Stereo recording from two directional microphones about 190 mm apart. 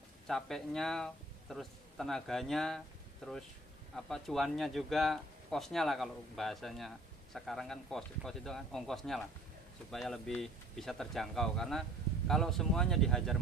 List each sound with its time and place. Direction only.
0.3 s speech: centre (ahead or behind)